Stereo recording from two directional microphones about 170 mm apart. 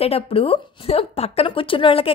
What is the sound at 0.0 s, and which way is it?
A woman's voice, 35° left (ahead or behind).